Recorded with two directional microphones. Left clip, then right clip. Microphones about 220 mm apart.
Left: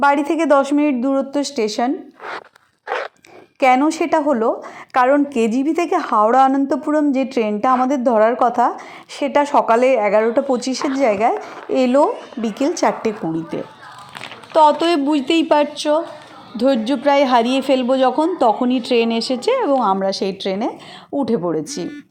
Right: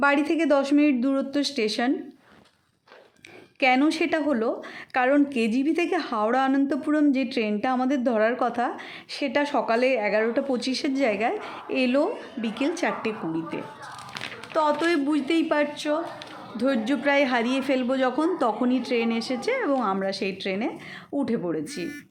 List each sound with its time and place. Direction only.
0.0 s a woman's voice: 5° left (ahead or behind)
3.8 s a woman's voice: 10° left (ahead or behind)